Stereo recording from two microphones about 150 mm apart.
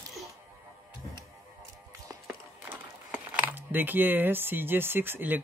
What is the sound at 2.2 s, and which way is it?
Speech, 10° right (ahead or behind).